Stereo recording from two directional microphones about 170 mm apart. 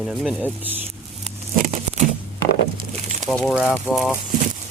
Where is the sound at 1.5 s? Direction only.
50° right (ahead or behind).